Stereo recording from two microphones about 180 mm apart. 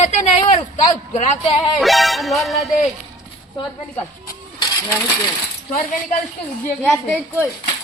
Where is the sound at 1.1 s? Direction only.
35° left (ahead or behind).